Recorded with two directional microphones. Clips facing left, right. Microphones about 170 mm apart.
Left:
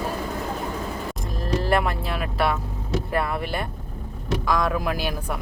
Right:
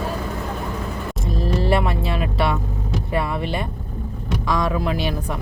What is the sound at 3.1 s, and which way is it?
Speech, 5° left (ahead or behind).